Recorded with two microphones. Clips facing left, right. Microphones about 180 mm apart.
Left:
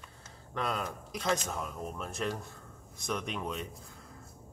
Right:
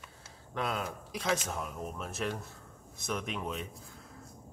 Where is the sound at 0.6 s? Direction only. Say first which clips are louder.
Even; centre (ahead or behind).